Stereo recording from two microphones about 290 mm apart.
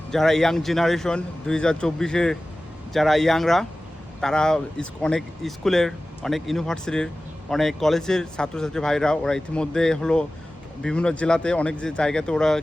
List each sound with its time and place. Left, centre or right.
0.1 s speech: centre